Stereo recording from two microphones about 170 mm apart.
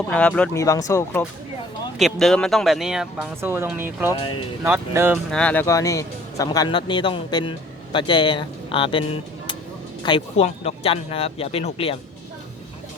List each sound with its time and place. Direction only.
0.1 s speech: 5° left (ahead or behind)
0.6 s speech: 20° left (ahead or behind)
2.0 s speech: centre (ahead or behind)
5.1 s speech: 5° left (ahead or behind); by 11.9 s 35° left (ahead or behind)